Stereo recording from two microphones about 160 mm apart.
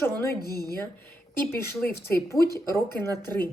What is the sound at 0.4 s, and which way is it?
Speech, 70° left (ahead or behind).